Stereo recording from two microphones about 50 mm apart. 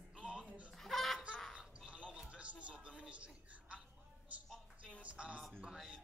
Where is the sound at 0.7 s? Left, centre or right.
Centre.